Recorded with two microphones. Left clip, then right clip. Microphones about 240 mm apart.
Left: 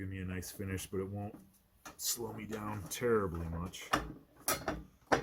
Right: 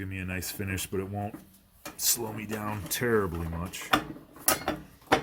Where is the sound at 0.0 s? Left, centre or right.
Right.